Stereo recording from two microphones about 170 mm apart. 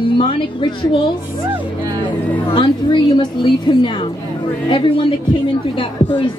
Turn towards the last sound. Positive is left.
turn(degrees=30)  # may be behind; listen again after turning